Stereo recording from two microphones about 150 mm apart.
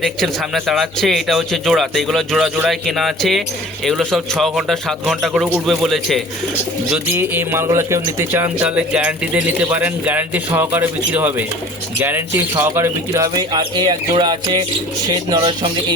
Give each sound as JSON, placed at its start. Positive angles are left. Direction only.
{"t": 0.0, "sound": "a man's voice", "side_deg": 0}
{"t": 7.1, "sound": "speech", "side_deg": -15}